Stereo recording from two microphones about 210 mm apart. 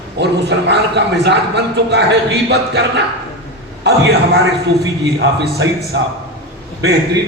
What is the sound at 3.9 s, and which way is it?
Speech, 55° right (ahead or behind).